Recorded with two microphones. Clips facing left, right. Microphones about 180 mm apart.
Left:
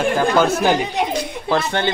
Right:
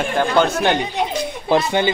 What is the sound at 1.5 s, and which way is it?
Speech, 15° right (ahead or behind).